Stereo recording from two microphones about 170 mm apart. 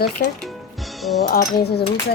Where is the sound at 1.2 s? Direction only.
65° left (ahead or behind).